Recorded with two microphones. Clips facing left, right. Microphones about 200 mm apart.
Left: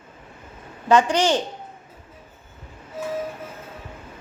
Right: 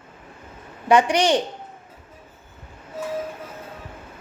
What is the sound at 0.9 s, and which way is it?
Speech, 15° right (ahead or behind).